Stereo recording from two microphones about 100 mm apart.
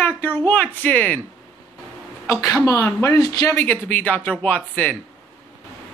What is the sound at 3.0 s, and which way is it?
Speech, 35° left (ahead or behind).